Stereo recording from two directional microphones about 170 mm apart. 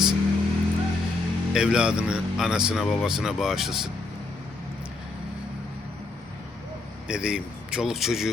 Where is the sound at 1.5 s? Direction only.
5° right (ahead or behind).